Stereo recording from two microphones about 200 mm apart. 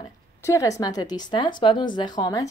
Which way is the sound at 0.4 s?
15° left (ahead or behind).